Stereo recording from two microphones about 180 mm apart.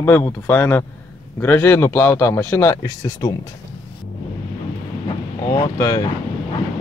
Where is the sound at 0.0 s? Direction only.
10° left (ahead or behind).